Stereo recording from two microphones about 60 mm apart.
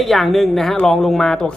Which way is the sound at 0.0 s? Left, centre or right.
Centre.